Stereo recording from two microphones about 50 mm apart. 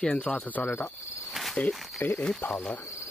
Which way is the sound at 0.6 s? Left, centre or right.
Left.